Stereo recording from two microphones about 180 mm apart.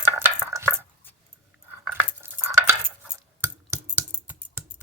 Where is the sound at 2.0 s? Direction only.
15° right (ahead or behind).